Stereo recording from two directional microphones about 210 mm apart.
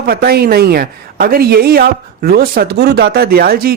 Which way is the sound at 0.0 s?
45° right (ahead or behind).